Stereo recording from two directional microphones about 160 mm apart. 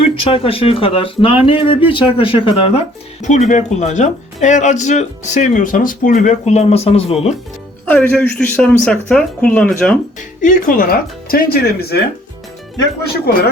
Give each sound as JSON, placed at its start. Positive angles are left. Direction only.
{"t": 0.0, "sound": "speech", "side_deg": 35}
{"t": 3.2, "sound": "speech", "side_deg": 45}
{"t": 7.9, "sound": "a woman's voice", "side_deg": 10}
{"t": 10.2, "sound": "speech", "side_deg": 55}
{"t": 11.3, "sound": "speech", "side_deg": 65}